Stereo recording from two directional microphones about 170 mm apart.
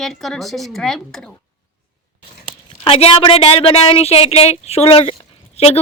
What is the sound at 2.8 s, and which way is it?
A woman's voice, 35° left (ahead or behind).